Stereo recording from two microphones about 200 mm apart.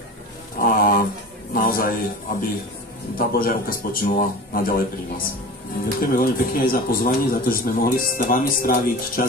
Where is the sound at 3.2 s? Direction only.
45° left (ahead or behind).